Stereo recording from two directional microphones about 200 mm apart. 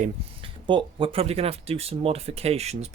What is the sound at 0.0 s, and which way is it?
Speech, 25° right (ahead or behind).